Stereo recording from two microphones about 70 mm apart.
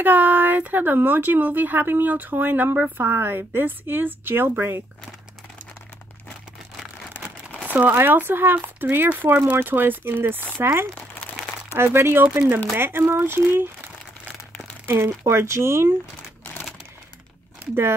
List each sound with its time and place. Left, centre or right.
0.0 s speech: right
7.6 s speech: right
14.9 s speech: right